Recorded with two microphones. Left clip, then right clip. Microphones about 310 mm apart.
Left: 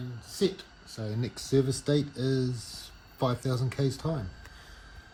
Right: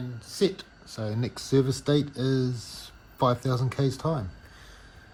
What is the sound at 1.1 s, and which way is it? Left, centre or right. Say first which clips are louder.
Speech: right 3 dB; centre.